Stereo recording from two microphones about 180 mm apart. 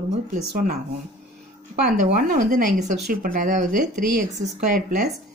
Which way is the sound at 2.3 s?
45° right (ahead or behind).